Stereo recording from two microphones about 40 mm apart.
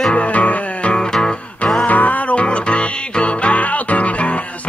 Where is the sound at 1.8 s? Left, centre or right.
Left.